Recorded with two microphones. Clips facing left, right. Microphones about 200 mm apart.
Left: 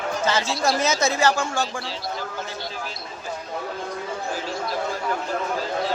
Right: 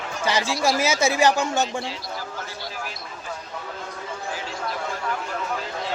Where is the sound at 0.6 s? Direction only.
10° right (ahead or behind).